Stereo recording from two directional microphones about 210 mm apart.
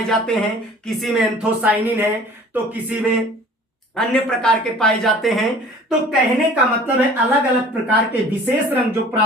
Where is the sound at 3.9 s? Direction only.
5° left (ahead or behind).